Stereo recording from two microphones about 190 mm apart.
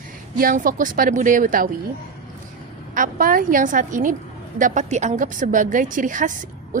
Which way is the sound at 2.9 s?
45° right (ahead or behind).